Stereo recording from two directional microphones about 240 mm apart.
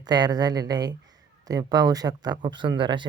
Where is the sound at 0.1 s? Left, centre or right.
Centre.